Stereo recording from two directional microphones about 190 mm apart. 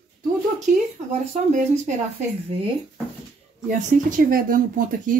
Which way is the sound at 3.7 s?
45° right (ahead or behind).